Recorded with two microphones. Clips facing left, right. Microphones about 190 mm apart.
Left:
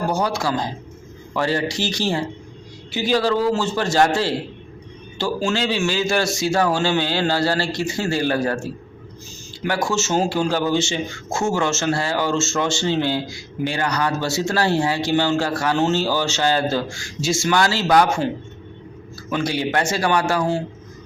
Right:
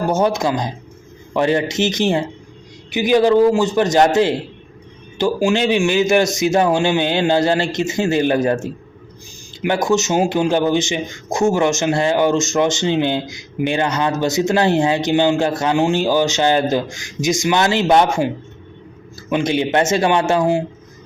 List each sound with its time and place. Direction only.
0.1 s a man's voice: 20° right (ahead or behind)
19.3 s a man's voice: 20° right (ahead or behind)